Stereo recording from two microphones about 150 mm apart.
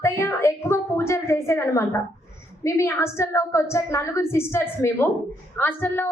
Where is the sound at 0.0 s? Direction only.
20° left (ahead or behind).